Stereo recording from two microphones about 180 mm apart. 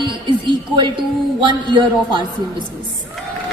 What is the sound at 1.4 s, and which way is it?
Speech, 25° right (ahead or behind).